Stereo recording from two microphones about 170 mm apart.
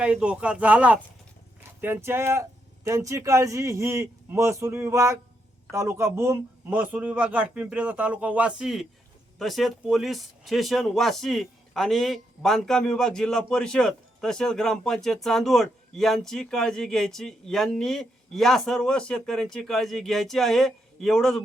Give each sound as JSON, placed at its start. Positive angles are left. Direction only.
{"t": 0.0, "sound": "speech", "side_deg": -5}